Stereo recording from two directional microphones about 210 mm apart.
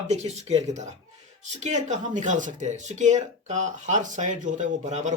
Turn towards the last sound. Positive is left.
turn(degrees=-35)  # may be behind; listen again after turning